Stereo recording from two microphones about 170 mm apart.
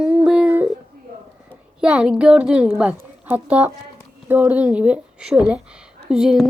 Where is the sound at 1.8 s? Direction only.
5° right (ahead or behind).